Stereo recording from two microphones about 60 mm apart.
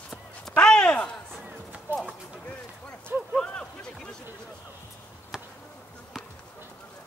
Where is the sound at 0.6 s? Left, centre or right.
Centre.